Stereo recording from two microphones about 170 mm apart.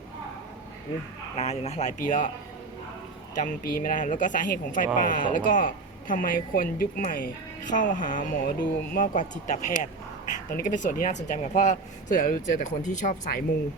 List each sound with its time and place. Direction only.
1.4 s speech: 40° left (ahead or behind)
3.3 s speech: 55° left (ahead or behind)